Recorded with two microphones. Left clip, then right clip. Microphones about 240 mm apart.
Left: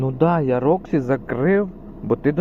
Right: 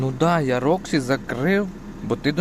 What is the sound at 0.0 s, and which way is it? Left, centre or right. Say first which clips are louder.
Speech: left 1 dB; centre.